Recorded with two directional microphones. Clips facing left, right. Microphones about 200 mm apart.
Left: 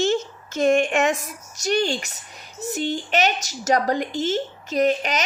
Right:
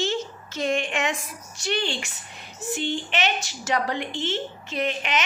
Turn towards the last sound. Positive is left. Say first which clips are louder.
# left 6 dB
turn(degrees=40)  # may be behind; listen again after turning